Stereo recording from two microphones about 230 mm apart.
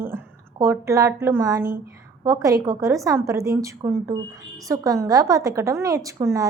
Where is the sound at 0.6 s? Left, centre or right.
Centre.